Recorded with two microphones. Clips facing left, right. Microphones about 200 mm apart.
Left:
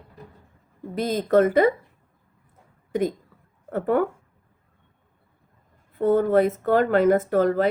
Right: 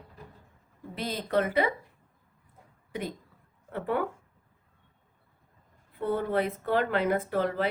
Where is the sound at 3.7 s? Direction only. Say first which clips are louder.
Left 8 dB; 45° left (ahead or behind).